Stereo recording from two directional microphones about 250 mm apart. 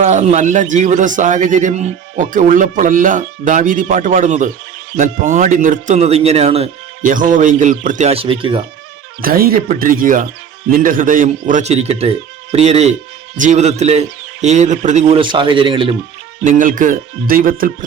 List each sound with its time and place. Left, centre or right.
0.0 s speech: right
9.2 s speech: right; by 16.0 s centre
16.4 s speech: right